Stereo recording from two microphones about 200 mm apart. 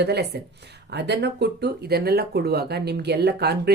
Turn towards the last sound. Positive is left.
turn(degrees=-55)  # may be behind; listen again after turning